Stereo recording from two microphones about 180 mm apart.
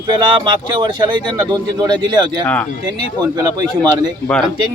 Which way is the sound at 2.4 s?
10° left (ahead or behind).